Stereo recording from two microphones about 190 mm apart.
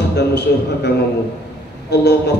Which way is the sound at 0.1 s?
60° left (ahead or behind).